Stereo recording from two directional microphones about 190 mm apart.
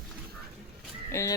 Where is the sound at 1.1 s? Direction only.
15° left (ahead or behind).